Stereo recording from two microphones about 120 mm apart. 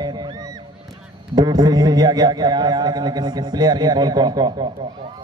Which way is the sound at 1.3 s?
35° right (ahead or behind).